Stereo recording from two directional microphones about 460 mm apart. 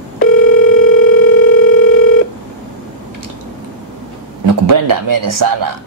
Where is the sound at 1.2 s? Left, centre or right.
Centre.